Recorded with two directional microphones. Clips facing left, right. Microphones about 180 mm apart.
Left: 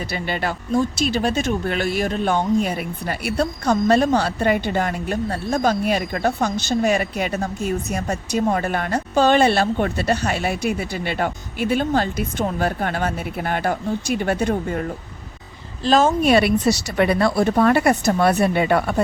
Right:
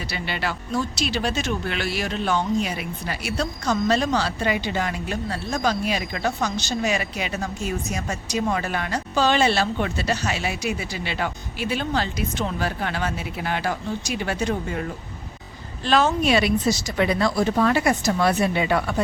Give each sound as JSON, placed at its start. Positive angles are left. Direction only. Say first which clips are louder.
{"t": 0.1, "sound": "speech", "louder": "left 3 dB", "side_deg": 50}